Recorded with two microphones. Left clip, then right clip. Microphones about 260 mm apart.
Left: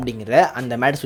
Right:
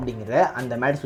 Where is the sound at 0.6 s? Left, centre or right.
Left.